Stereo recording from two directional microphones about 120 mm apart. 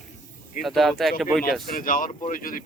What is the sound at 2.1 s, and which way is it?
Speech, 90° left.